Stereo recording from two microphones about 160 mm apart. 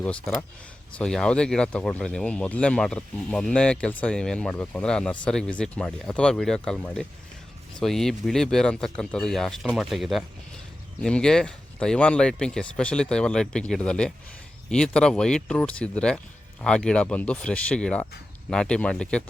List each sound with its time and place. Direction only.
0.0 s speech: 5° left (ahead or behind)